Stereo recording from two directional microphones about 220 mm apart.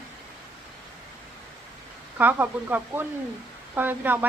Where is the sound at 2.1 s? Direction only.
10° right (ahead or behind).